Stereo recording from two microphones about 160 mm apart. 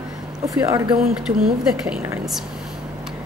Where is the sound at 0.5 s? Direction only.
20° right (ahead or behind).